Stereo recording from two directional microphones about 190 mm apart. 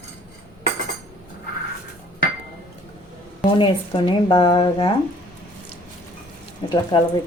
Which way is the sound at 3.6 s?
25° left (ahead or behind).